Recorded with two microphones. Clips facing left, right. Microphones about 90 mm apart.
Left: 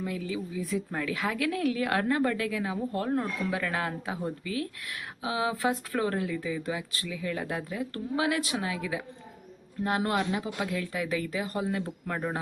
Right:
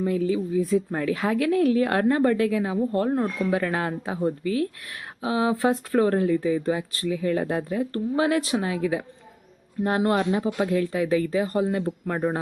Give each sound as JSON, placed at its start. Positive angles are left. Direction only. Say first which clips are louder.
{"t": 0.0, "sound": "speech", "louder": "right 9 dB", "side_deg": -35}